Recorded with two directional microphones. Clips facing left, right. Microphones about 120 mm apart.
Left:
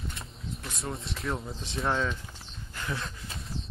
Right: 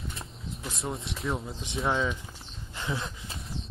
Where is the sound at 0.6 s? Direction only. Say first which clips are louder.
Right 3 dB; centre (ahead or behind).